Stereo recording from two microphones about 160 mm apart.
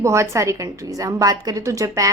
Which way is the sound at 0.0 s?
20° right (ahead or behind).